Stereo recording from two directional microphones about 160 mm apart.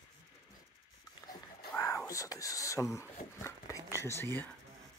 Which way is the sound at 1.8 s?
20° left (ahead or behind).